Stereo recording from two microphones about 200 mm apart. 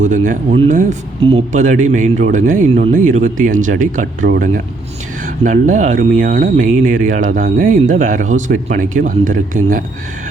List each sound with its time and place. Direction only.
0.0 s speech: 40° right (ahead or behind)